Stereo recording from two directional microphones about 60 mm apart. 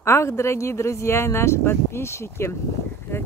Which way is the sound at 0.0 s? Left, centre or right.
Left.